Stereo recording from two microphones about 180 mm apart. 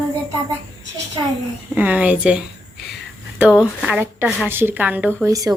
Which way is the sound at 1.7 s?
10° right (ahead or behind).